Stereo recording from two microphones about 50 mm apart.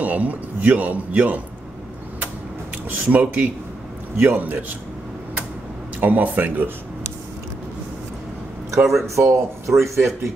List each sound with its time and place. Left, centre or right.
0.0 s a man's voice: right
2.9 s a man's voice: right
5.9 s a man's voice: right
8.7 s speech: centre
9.0 s speech: right